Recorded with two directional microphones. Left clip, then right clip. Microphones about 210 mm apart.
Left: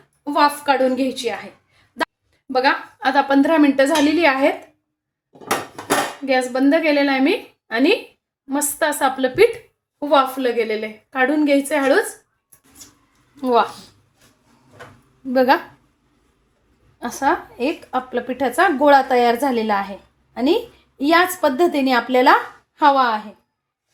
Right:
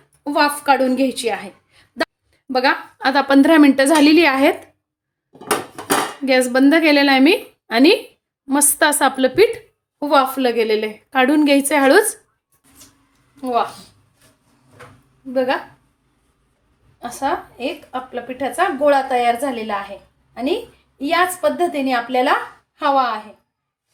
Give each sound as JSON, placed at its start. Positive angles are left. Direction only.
{"t": 0.3, "sound": "a woman's voice", "side_deg": -15}
{"t": 6.2, "sound": "a woman's voice", "side_deg": -30}
{"t": 13.4, "sound": "speech", "side_deg": 25}
{"t": 15.3, "sound": "a woman's voice", "side_deg": 35}
{"t": 17.0, "sound": "a woman's voice", "side_deg": 30}